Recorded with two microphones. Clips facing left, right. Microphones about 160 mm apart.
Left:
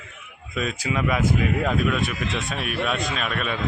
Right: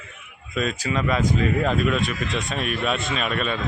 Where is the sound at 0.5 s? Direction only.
10° left (ahead or behind).